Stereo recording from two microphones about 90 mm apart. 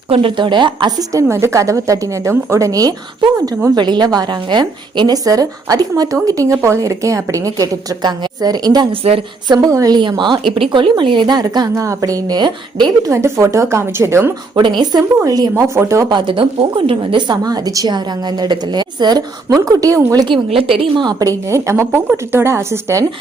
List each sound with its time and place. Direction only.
0.2 s a woman's voice: 70° right (ahead or behind)
0.9 s a woman's voice: 35° right (ahead or behind)
3.8 s a woman's voice: 55° right (ahead or behind)
9.6 s a woman's voice: 40° right (ahead or behind)
9.9 s a woman's voice: 55° right (ahead or behind)
11.7 s a woman's voice: 35° right (ahead or behind); by 12.9 s 55° right (ahead or behind)
13.1 s a woman's voice: 30° right (ahead or behind)
14.5 s a woman's voice: 60° right (ahead or behind)
15.2 s a woman's voice: 40° right (ahead or behind)
16.0 s a woman's voice: 65° right (ahead or behind); by 17.9 s 45° right (ahead or behind)
17.9 s a woman's voice: 55° right (ahead or behind); by 20.2 s 35° right (ahead or behind)
20.2 s a woman's voice: 80° right
21.0 s a woman's voice: 45° right (ahead or behind); by 23.0 s 30° right (ahead or behind)